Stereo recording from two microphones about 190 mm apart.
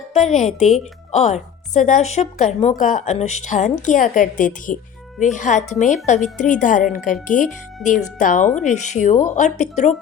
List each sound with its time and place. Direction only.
0.1 s a woman's voice: 35° left (ahead or behind)